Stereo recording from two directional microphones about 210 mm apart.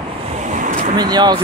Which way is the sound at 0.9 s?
20° right (ahead or behind).